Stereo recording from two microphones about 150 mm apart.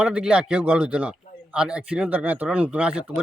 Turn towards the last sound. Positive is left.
turn(degrees=-5)  # may be behind; listen again after turning